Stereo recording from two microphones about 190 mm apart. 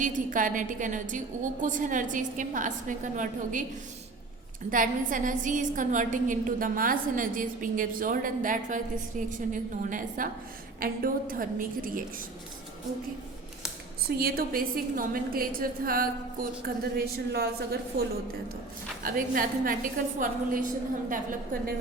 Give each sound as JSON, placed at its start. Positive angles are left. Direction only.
{"t": 0.0, "sound": "a woman's voice", "side_deg": -45}
{"t": 4.7, "sound": "a woman's voice", "side_deg": -45}
{"t": 14.2, "sound": "a woman's voice", "side_deg": -50}
{"t": 19.0, "sound": "a woman's voice", "side_deg": -45}